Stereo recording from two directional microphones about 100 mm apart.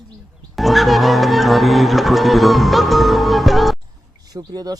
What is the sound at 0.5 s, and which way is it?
Music, centre (ahead or behind).